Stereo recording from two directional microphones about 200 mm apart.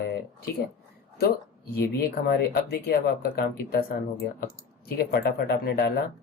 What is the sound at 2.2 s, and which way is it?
Speech, 50° left (ahead or behind).